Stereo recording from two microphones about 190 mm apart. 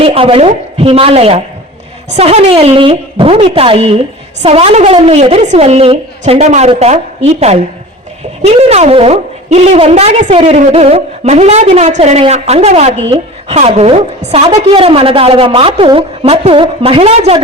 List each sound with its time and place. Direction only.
0.0 s a woman's voice: 30° right (ahead or behind)